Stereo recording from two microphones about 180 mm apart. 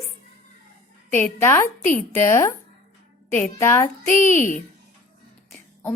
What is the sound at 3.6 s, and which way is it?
Speech, 15° left (ahead or behind).